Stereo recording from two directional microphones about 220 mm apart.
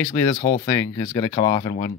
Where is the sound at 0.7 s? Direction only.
15° left (ahead or behind).